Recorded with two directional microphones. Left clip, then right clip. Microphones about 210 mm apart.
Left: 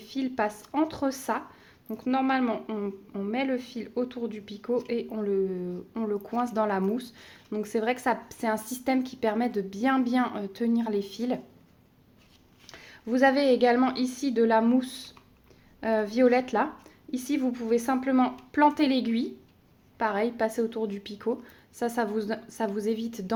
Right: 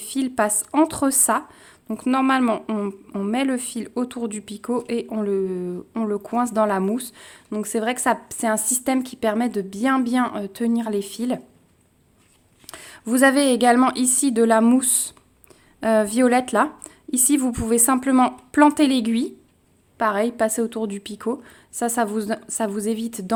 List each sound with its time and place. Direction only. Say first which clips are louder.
0.0 s a woman's voice: right 7 dB; 45° right (ahead or behind)
12.7 s a woman's voice: right 6 dB; 45° right (ahead or behind)